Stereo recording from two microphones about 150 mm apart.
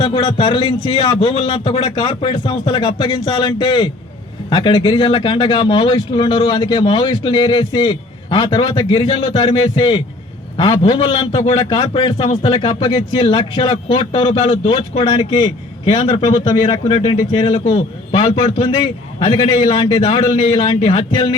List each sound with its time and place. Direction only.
0.0 s a man's voice: 30° left (ahead or behind)
1.8 s a man's voice: 30° left (ahead or behind)